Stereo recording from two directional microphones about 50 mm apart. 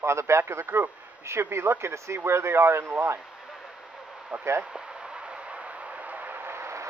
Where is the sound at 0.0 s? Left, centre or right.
Right.